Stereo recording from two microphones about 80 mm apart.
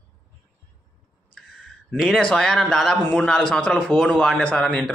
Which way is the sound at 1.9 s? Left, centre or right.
Centre.